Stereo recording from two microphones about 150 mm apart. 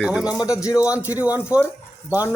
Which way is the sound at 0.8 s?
10° right (ahead or behind).